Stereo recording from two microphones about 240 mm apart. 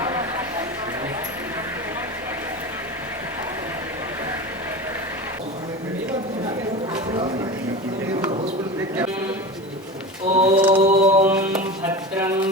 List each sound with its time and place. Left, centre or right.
10.3 s mantra: right
11.3 s music: centre